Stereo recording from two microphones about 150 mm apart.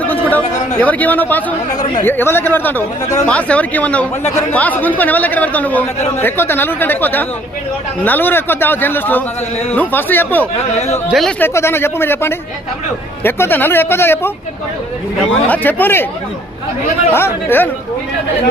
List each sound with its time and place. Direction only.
0.8 s speech: 10° left (ahead or behind)
10.8 s a man's voice: 45° left (ahead or behind)
11.1 s speech: centre (ahead or behind)
11.3 s speech: 15° left (ahead or behind)
15.4 s speech: 10° left (ahead or behind)
17.2 s speech: 15° left (ahead or behind)